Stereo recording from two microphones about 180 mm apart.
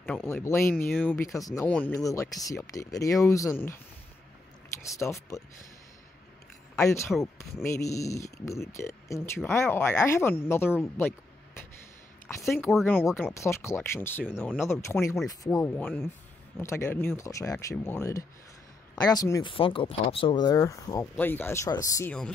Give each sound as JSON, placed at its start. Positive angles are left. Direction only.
{"t": 0.0, "sound": "speech", "side_deg": 5}
{"t": 1.7, "sound": "speech", "side_deg": 5}
{"t": 4.8, "sound": "speech", "side_deg": 15}
{"t": 6.8, "sound": "speech", "side_deg": 15}
{"t": 12.4, "sound": "speech", "side_deg": 10}
{"t": 19.5, "sound": "speech", "side_deg": 30}